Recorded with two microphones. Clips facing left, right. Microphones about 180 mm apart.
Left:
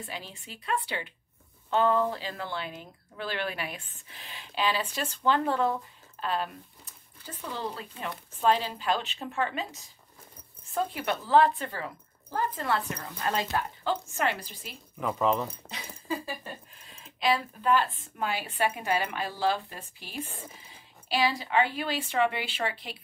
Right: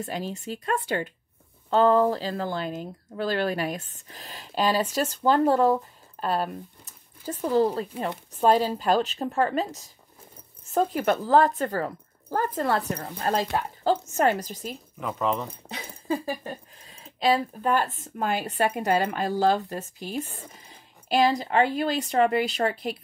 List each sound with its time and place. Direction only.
0.0 s speech: 45° right (ahead or behind)
15.0 s speech: centre (ahead or behind)
16.1 s speech: 35° right (ahead or behind)